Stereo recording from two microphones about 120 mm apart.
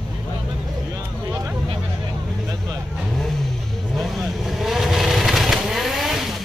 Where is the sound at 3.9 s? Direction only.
Centre (ahead or behind).